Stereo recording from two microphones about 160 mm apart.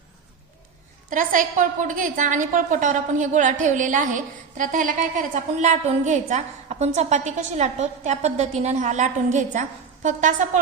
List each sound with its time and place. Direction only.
1.1 s a woman's voice: 55° right (ahead or behind)